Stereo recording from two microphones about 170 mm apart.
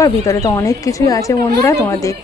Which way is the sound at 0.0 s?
20° left (ahead or behind).